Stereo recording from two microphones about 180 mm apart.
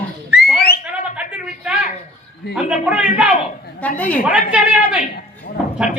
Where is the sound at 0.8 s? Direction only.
5° right (ahead or behind).